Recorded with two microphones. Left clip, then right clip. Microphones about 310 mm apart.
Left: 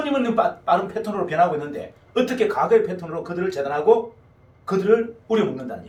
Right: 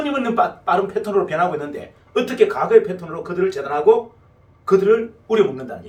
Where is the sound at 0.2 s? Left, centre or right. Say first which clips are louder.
Right 3 dB; centre.